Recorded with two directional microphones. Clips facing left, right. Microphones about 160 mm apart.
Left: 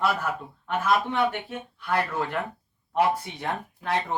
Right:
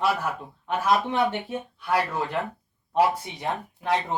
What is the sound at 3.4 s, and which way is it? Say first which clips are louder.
Speech: right 1 dB; 20° right (ahead or behind).